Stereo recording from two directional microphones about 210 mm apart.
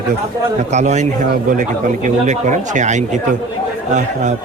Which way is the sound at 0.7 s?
35° right (ahead or behind).